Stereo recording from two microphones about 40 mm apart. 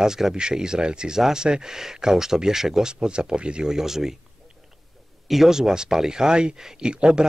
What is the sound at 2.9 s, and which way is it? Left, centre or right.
Speech, right.